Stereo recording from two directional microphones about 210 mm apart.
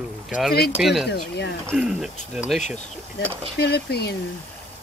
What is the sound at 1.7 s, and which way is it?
Speech, centre (ahead or behind).